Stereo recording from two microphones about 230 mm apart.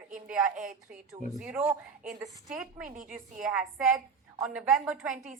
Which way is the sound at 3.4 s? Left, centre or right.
Centre.